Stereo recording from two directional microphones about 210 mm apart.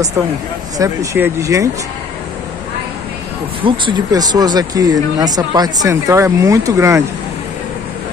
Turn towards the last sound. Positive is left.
turn(degrees=-15)  # may be behind; listen again after turning